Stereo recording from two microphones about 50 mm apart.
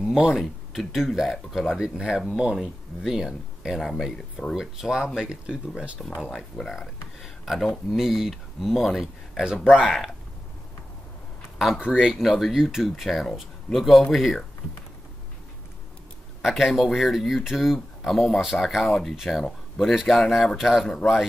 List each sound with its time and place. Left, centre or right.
0.0 s speech: centre
3.8 s speech: centre
4.6 s speech: centre
6.7 s speech: centre
11.5 s a sound: centre
11.8 s speech: centre
12.1 s speech: centre
16.4 s speech: centre